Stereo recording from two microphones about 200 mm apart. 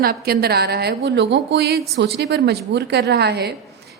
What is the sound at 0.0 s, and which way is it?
A woman's voice, 50° right (ahead or behind).